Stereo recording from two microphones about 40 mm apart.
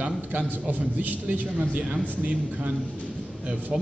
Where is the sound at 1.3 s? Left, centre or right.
Right.